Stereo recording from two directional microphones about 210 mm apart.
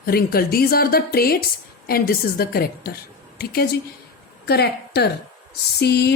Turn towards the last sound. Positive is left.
turn(degrees=50)  # may be behind; listen again after turning